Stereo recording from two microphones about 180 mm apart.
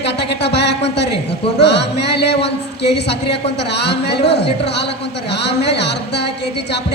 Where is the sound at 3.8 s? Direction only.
70° left (ahead or behind).